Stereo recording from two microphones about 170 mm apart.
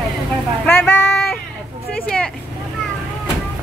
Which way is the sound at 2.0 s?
5° left (ahead or behind).